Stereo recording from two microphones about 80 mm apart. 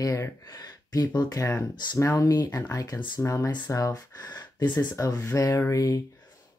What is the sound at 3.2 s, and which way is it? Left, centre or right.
Speech, left.